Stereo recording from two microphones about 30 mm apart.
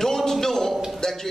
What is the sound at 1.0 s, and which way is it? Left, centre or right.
Speech, left.